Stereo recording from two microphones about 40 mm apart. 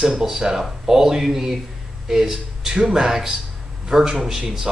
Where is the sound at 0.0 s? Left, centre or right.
Centre.